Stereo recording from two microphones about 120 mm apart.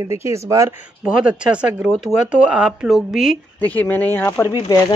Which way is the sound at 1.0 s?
10° right (ahead or behind).